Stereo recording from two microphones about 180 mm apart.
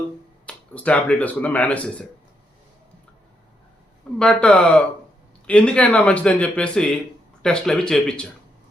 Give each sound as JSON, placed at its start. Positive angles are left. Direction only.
{"t": 0.4, "sound": "speech", "side_deg": 5}
{"t": 4.2, "sound": "speech", "side_deg": 5}